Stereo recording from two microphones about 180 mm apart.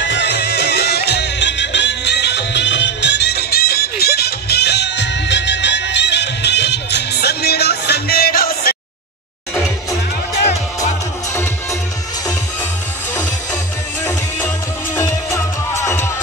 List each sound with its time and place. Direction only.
0.0 s music: 80° left; by 8.7 s 55° left (ahead or behind)
15.0 s music: 15° left (ahead or behind)